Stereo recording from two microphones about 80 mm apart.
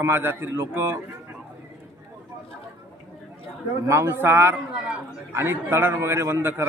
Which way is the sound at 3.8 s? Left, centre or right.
Right.